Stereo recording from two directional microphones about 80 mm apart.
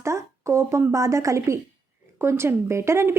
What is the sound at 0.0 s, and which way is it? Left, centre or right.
A woman's voice, right.